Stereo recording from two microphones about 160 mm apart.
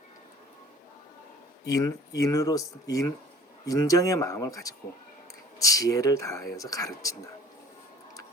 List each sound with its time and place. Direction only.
1.6 s speech: 20° left (ahead or behind)